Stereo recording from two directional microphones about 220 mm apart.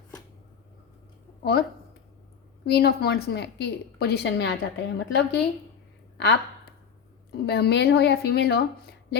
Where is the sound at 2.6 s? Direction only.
50° left (ahead or behind).